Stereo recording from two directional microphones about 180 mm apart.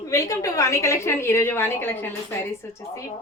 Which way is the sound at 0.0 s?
15° left (ahead or behind).